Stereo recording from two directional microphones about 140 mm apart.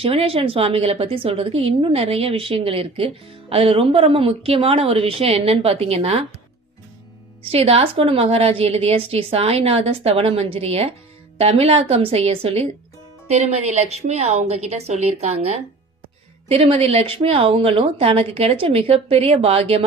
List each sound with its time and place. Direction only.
0.0 s a woman's voice: 45° right (ahead or behind)
7.5 s a woman's voice: 45° right (ahead or behind)